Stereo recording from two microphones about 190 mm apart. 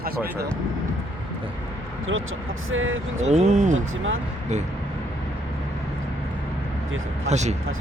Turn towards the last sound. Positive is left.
turn(degrees=-35)  # may be behind; listen again after turning